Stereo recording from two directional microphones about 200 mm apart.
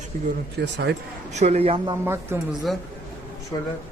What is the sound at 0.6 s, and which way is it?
Speech, 60° right (ahead or behind).